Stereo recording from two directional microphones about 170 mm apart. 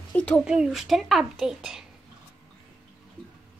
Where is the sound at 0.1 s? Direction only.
5° left (ahead or behind).